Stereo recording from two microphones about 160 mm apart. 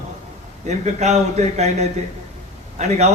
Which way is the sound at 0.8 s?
45° right (ahead or behind).